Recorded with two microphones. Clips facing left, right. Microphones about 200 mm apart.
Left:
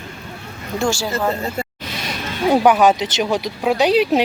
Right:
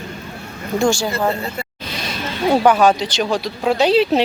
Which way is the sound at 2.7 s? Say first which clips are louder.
Even; 20° left (ahead or behind).